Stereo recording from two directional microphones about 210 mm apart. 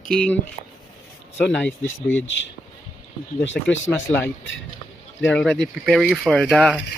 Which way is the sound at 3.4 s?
60° left (ahead or behind).